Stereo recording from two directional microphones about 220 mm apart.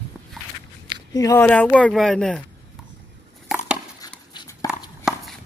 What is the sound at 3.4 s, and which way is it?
Chopping, 5° right (ahead or behind).